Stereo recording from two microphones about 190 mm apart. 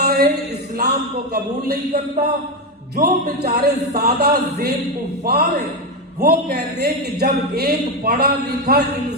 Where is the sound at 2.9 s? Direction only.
55° right (ahead or behind).